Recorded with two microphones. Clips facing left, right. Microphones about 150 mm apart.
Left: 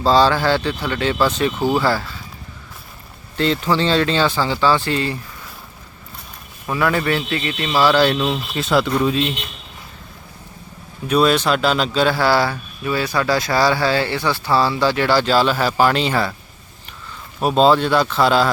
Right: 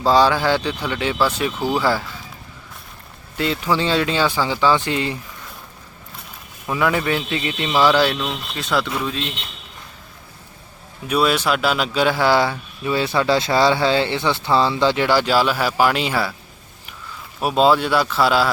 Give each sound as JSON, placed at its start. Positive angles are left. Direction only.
{"t": 0.0, "sound": "speech", "side_deg": -15}
{"t": 3.3, "sound": "speech", "side_deg": -10}
{"t": 6.7, "sound": "speech", "side_deg": -15}
{"t": 8.1, "sound": "speech", "side_deg": 5}
{"t": 11.1, "sound": "speech", "side_deg": -5}
{"t": 17.4, "sound": "speech", "side_deg": -5}